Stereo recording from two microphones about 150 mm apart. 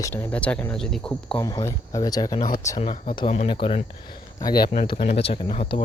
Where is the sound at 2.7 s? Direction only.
55° left (ahead or behind).